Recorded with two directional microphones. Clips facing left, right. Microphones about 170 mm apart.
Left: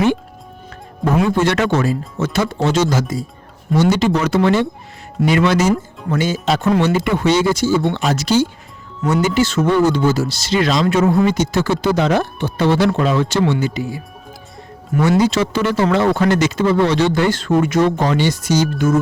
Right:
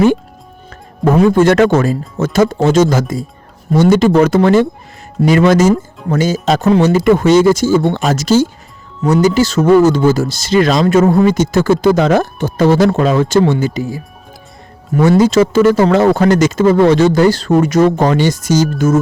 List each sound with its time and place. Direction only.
1.0 s speech: 50° right (ahead or behind)
15.2 s speech: 45° right (ahead or behind)